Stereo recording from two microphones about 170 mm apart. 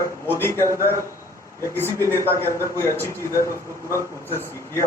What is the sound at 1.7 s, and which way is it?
A man's voice, 15° left (ahead or behind).